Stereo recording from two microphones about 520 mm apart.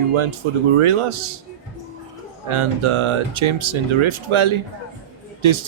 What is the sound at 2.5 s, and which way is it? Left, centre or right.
Speech, right.